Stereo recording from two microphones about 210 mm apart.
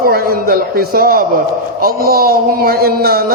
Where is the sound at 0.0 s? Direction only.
45° right (ahead or behind).